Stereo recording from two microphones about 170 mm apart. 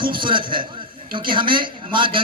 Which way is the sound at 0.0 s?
30° right (ahead or behind).